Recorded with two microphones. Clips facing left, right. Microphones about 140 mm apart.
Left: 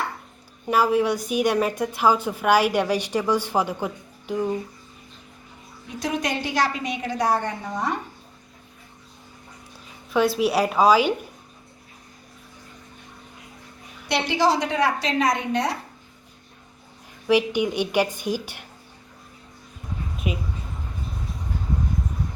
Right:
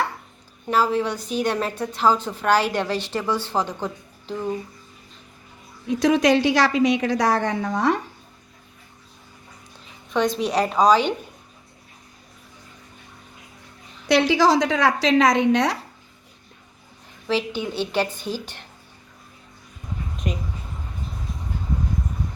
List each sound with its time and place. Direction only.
0.7 s a woman's voice: 10° left (ahead or behind)
6.0 s a woman's voice: 90° right
10.1 s a woman's voice: 5° left (ahead or behind)
14.1 s a woman's voice: 90° right
17.2 s a woman's voice: 15° left (ahead or behind)
20.1 s a sound: 5° left (ahead or behind)